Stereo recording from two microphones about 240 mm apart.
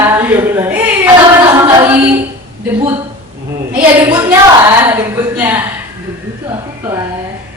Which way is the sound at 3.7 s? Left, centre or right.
Centre.